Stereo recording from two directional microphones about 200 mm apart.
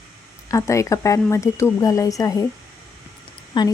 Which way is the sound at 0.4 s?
15° left (ahead or behind).